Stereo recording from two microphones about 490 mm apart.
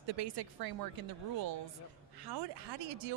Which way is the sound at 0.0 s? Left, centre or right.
Right.